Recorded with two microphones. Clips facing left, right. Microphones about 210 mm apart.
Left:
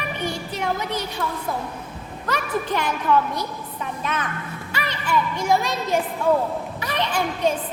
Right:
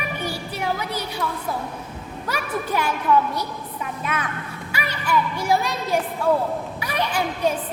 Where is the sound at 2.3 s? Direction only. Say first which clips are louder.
Left 2 dB; 10° right (ahead or behind).